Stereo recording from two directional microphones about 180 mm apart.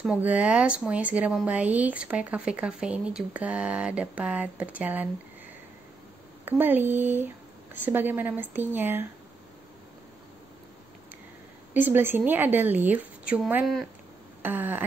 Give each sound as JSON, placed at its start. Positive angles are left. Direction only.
{"t": 0.0, "sound": "a woman's voice", "side_deg": -10}
{"t": 6.4, "sound": "a woman's voice", "side_deg": -10}
{"t": 11.7, "sound": "a woman's voice", "side_deg": -10}